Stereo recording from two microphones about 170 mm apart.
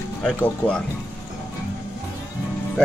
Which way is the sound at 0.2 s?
5° left (ahead or behind).